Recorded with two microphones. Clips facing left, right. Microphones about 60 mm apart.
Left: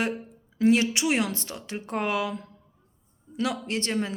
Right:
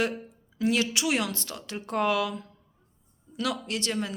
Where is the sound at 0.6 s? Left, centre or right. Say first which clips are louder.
Left 4 dB; left.